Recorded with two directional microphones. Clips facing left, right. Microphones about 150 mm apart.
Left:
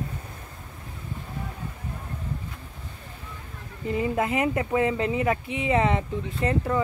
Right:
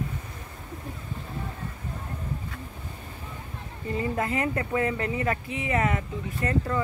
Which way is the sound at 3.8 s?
15° left (ahead or behind).